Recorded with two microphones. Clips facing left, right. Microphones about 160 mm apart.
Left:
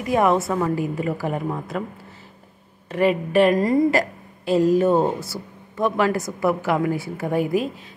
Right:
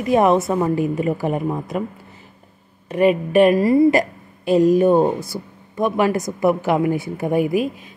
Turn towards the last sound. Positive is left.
turn(degrees=-15)  # may be behind; listen again after turning